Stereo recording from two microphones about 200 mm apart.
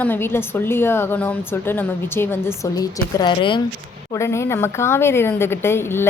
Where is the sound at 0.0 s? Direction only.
10° left (ahead or behind).